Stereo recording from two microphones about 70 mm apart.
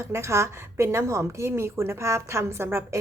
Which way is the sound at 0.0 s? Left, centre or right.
Right.